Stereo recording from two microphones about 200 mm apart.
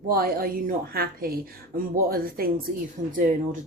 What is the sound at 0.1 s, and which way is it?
Speech, 50° right (ahead or behind).